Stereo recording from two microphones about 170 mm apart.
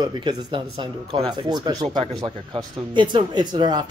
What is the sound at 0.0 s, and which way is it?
Speech, 25° right (ahead or behind).